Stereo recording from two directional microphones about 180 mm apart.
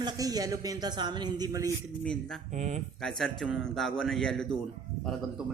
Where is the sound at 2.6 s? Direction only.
40° right (ahead or behind).